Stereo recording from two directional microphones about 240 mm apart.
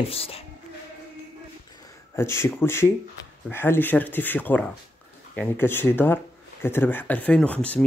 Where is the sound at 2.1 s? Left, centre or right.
Centre.